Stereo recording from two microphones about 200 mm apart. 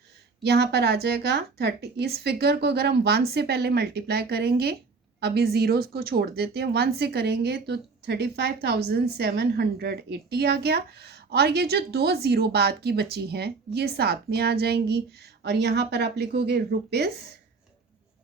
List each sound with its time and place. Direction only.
0.4 s speech: 55° right (ahead or behind)